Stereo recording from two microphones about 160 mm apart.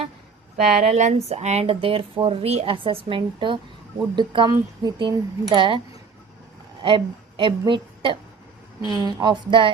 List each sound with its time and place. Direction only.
0.5 s speech: centre (ahead or behind)
0.9 s speech: 45° right (ahead or behind)
6.8 s a woman's voice: 35° right (ahead or behind)